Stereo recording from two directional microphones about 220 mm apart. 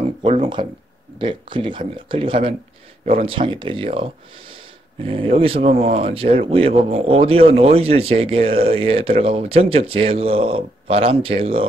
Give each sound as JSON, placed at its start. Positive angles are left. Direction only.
{"t": 0.2, "sound": "speech", "side_deg": -25}